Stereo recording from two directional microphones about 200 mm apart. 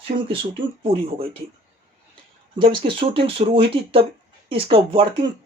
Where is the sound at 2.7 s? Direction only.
25° right (ahead or behind).